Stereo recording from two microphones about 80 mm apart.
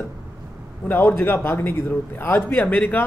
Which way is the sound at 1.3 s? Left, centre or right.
Left.